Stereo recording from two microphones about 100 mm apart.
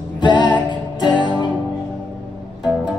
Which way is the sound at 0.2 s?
50° left (ahead or behind).